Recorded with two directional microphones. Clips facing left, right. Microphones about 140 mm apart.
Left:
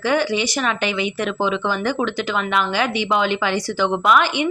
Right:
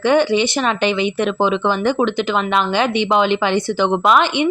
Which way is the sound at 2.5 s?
25° right (ahead or behind).